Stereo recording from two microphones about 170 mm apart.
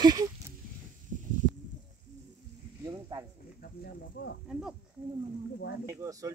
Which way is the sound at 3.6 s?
70° left (ahead or behind).